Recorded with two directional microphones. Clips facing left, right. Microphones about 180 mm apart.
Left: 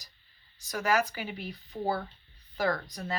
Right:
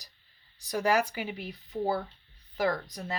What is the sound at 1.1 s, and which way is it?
Speech, 20° right (ahead or behind).